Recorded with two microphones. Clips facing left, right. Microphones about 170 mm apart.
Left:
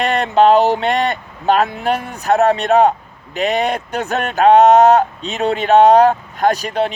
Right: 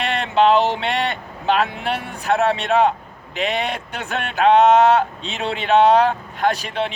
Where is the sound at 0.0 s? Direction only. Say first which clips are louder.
Left 4 dB; 45° left (ahead or behind).